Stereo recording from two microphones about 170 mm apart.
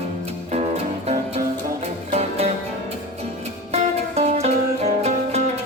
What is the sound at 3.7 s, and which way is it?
Music, 40° right (ahead or behind).